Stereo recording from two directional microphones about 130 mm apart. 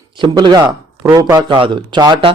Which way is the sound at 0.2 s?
35° right (ahead or behind).